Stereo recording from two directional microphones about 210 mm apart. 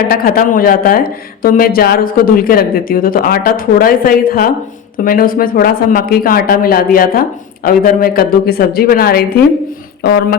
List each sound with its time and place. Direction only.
0.1 s speech: 45° left (ahead or behind)